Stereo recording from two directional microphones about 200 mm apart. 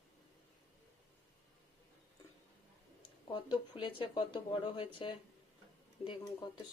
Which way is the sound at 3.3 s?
25° left (ahead or behind).